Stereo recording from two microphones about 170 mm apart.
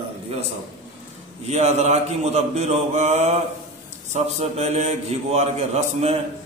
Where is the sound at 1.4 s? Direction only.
40° right (ahead or behind).